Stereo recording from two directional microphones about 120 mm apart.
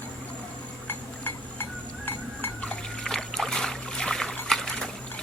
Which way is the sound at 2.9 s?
5° left (ahead or behind).